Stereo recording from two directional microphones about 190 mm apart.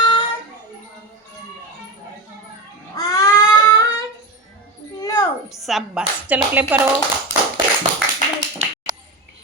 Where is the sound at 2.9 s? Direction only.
20° left (ahead or behind).